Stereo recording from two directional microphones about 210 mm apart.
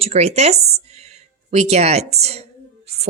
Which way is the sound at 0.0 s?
30° right (ahead or behind).